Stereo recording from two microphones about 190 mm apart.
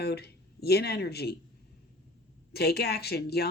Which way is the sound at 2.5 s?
55° left (ahead or behind).